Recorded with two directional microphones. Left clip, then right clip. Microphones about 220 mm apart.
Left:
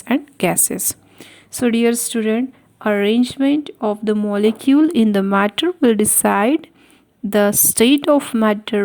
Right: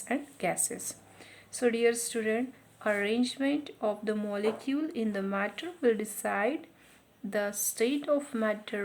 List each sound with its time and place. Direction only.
0.0 s a woman's voice: 40° left (ahead or behind)